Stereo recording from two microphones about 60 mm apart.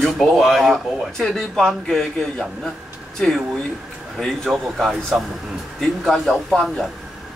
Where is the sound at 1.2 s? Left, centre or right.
Centre.